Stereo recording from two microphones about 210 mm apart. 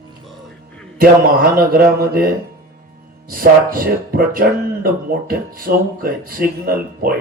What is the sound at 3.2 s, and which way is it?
Speech, 45° right (ahead or behind).